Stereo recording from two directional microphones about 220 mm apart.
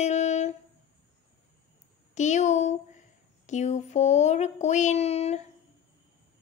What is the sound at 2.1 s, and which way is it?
Speech, 35° left (ahead or behind).